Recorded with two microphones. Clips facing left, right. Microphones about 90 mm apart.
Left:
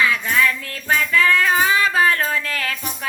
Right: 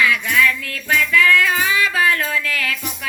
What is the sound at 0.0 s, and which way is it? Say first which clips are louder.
Child singing: right 1 dB; 30° left (ahead or behind).